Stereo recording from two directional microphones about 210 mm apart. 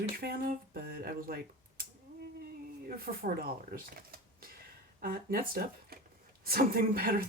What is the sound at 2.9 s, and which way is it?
Speech, 45° right (ahead or behind).